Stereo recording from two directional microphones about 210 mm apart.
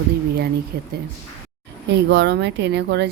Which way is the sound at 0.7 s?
45° right (ahead or behind).